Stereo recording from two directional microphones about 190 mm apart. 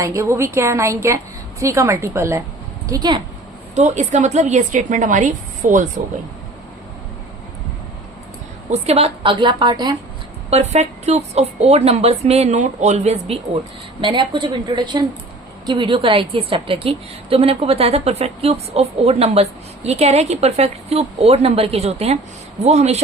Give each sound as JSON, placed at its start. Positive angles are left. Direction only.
{"t": 0.0, "sound": "a woman's voice", "side_deg": -15}
{"t": 3.8, "sound": "a woman's voice", "side_deg": -40}
{"t": 8.7, "sound": "a woman's voice", "side_deg": -30}
{"t": 10.5, "sound": "a woman's voice", "side_deg": -35}